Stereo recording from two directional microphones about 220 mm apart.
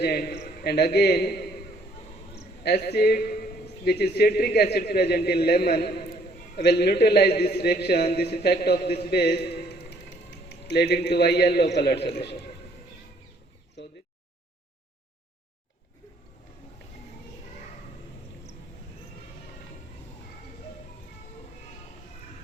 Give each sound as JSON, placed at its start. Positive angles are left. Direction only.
{"t": 0.0, "sound": "a man's voice", "side_deg": 45}
{"t": 2.6, "sound": "a man's voice", "side_deg": 50}
{"t": 10.5, "sound": "a man's voice", "side_deg": 50}
{"t": 13.8, "sound": "a sound", "side_deg": 50}